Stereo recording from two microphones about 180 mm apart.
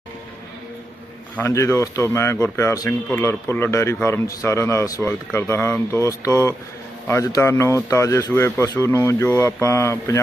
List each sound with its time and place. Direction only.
1.4 s a man's voice: 15° left (ahead or behind)